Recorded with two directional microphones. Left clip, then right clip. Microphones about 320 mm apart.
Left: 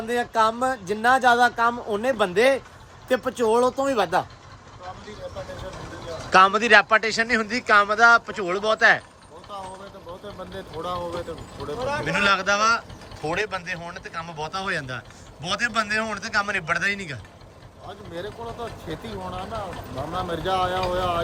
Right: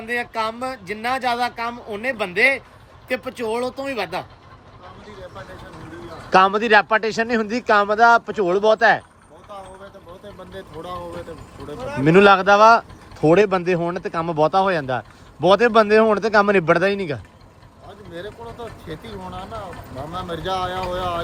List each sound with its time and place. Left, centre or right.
0.1 s speech: centre
6.3 s speech: centre
10.5 s speech: centre
11.8 s speech: left
12.0 s speech: centre
18.1 s speech: centre